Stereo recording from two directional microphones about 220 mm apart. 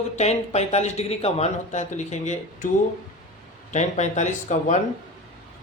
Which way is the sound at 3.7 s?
35° left (ahead or behind).